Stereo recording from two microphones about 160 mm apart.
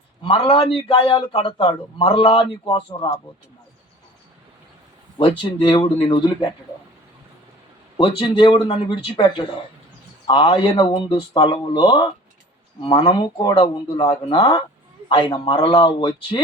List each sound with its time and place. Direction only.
0.2 s a man's voice: 35° left (ahead or behind)
5.4 s speech: 30° left (ahead or behind)
7.9 s a man's voice: 30° left (ahead or behind)